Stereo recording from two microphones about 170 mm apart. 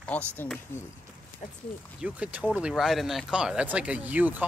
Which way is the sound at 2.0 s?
10° right (ahead or behind).